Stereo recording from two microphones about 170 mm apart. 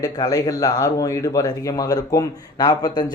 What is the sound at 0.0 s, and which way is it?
Speech, 20° left (ahead or behind).